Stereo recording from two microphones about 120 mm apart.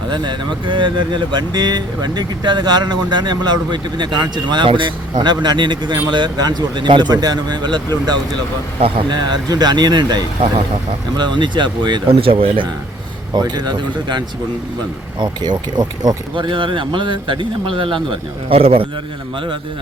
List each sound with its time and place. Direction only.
0.1 s speech: 40° right (ahead or behind)
8.8 s speech: 45° right (ahead or behind)
13.3 s speech: 35° right (ahead or behind); by 18.9 s 50° right (ahead or behind)